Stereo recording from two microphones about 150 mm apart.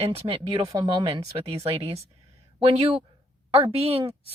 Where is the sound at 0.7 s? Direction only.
30° right (ahead or behind).